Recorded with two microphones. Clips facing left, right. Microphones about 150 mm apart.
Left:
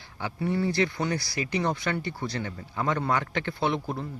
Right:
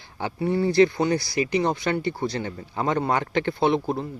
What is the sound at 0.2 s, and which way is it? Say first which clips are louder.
Speech: right 4 dB; 25° right (ahead or behind).